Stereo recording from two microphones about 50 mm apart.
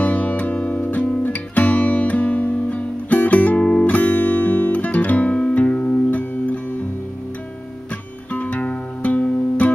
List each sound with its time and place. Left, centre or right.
0.0 s music: left
0.8 s guitar: left
6.0 s music: left
8.3 s music: left